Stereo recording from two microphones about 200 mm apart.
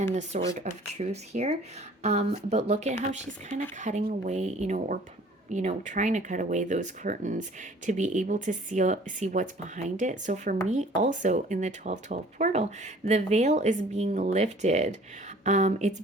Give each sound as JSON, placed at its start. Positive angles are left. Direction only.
{"t": 0.0, "sound": "speech", "side_deg": -35}